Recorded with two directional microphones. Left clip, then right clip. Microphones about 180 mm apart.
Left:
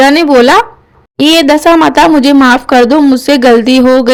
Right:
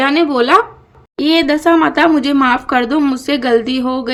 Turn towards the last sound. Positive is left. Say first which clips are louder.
# left 12 dB
turn(degrees=40)  # may be behind; listen again after turning